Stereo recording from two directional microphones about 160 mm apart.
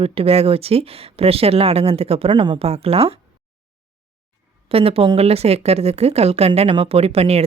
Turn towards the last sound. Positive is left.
turn(degrees=-40)  # may be behind; listen again after turning